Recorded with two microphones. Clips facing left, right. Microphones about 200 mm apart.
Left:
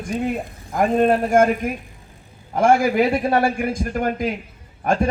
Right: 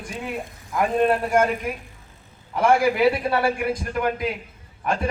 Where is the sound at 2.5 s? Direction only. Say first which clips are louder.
Left 3 dB; 45° left (ahead or behind).